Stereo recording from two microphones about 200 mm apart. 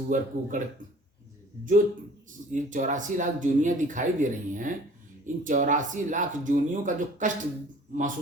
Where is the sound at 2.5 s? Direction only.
40° right (ahead or behind).